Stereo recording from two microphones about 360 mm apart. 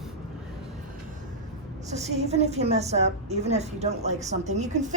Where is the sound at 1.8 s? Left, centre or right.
Centre.